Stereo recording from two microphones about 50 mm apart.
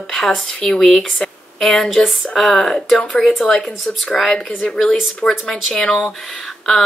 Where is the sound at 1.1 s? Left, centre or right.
Centre.